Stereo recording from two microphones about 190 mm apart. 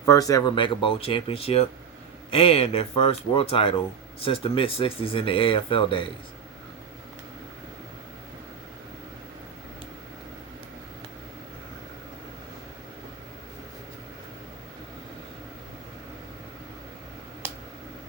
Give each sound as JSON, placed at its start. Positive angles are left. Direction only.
{"t": 0.0, "sound": "speech", "side_deg": 20}